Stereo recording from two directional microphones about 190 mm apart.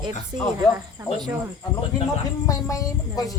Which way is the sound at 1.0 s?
15° right (ahead or behind).